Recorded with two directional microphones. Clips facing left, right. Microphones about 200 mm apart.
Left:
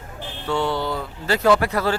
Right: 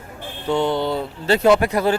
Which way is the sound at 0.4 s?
20° right (ahead or behind).